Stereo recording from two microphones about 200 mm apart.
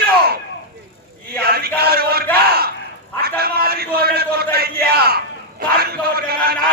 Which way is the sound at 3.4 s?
50° right (ahead or behind).